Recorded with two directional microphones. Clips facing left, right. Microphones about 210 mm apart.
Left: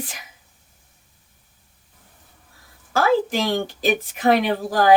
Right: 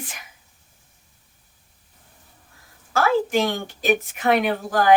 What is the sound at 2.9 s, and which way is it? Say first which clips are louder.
A woman's voice: left 1 dB; 35° left (ahead or behind).